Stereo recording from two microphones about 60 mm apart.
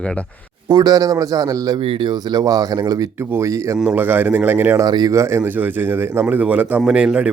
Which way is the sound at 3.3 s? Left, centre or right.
Right.